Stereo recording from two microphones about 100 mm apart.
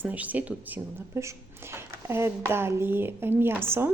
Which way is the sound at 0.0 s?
15° right (ahead or behind).